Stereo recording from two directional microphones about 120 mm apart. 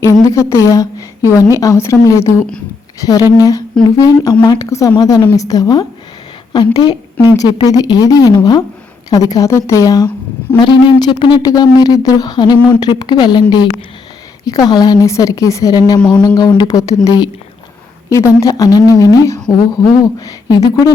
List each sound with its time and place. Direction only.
0.0 s a woman's voice: 25° left (ahead or behind)
10.6 s speech: 40° left (ahead or behind)
14.4 s speech: 30° left (ahead or behind)
16.0 s speech: 10° left (ahead or behind)
16.2 s a woman's voice: 35° left (ahead or behind)